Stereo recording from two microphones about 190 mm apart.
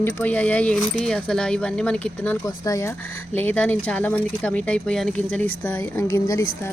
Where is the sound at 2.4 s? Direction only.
15° left (ahead or behind).